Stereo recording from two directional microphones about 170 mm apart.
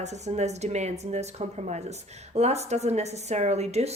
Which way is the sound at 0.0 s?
40° right (ahead or behind).